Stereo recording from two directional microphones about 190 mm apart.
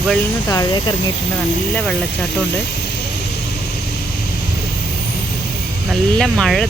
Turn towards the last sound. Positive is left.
turn(degrees=0)  # may be behind; listen again after turning